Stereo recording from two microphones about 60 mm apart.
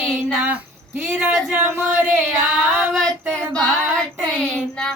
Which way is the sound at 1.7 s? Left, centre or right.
Right.